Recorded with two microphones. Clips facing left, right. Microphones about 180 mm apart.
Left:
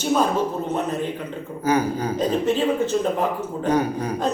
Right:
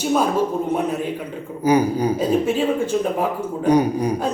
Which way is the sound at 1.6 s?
15° right (ahead or behind).